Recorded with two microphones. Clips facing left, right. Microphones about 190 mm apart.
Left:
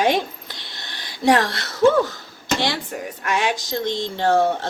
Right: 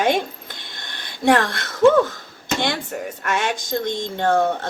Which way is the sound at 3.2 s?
50° right (ahead or behind).